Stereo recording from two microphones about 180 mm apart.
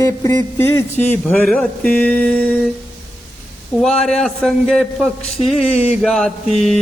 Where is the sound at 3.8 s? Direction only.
Centre (ahead or behind).